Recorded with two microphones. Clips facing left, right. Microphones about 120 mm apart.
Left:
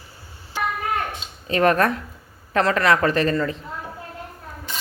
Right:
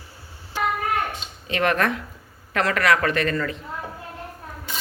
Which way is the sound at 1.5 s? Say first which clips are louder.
Left 4 dB; 40° left (ahead or behind).